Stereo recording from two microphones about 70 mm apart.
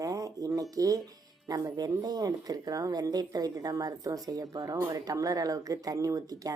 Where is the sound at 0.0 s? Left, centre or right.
Right.